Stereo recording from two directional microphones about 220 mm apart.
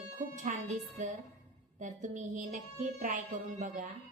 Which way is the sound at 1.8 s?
35° right (ahead or behind).